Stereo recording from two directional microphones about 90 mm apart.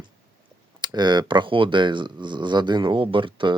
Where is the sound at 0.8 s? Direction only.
55° right (ahead or behind).